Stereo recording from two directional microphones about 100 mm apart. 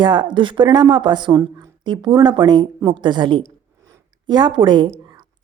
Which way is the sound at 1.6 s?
50° right (ahead or behind).